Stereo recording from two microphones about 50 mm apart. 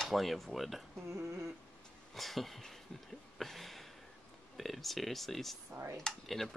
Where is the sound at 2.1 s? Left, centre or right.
Centre.